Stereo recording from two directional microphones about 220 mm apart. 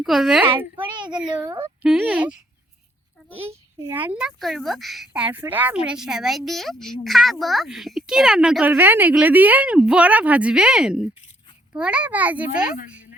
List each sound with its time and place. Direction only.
0.0 s speech: centre (ahead or behind)
0.8 s a child's voice: 20° right (ahead or behind)
1.1 s speech: 5° right (ahead or behind)
1.5 s speech: 25° right (ahead or behind)
1.8 s speech: 5° right (ahead or behind)
3.5 s speech: 10° right (ahead or behind)